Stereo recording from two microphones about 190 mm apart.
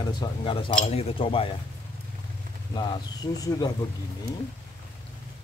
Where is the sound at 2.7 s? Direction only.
20° left (ahead or behind).